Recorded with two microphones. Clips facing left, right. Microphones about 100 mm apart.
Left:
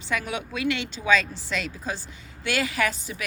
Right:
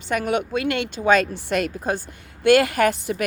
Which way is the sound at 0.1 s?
55° right (ahead or behind).